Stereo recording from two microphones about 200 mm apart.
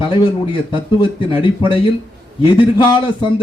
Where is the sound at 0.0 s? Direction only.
25° left (ahead or behind).